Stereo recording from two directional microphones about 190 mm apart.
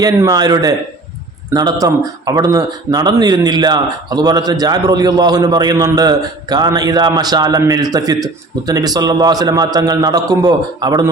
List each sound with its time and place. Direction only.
0.0 s speech: 20° right (ahead or behind)